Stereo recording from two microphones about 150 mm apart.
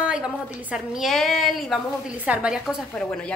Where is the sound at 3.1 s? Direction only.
5° left (ahead or behind).